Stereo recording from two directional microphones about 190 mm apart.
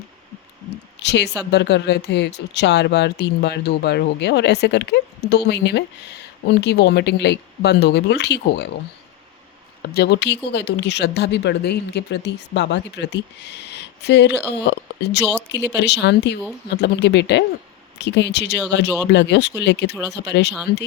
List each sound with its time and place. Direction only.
1.0 s a woman's voice: 65° left (ahead or behind)
9.8 s speech: 55° left (ahead or behind)